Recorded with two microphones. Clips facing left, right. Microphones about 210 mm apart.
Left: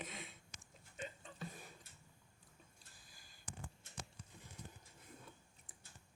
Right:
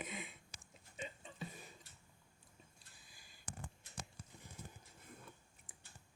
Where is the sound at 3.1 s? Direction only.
45° left (ahead or behind).